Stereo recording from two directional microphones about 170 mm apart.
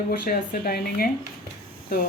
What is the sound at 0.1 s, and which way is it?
A woman's voice, 60° left (ahead or behind).